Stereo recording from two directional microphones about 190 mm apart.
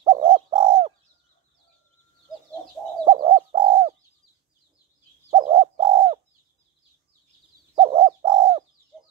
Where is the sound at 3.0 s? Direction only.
25° right (ahead or behind).